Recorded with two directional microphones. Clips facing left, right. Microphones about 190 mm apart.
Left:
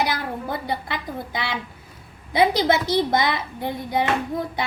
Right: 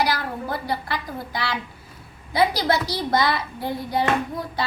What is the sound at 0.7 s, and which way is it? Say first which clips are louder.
A woman's voice: even; 20° left (ahead or behind).